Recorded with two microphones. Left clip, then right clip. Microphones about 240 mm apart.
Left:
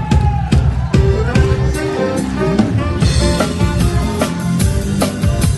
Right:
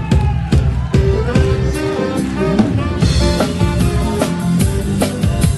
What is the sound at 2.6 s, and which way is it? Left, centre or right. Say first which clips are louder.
Music: even; left.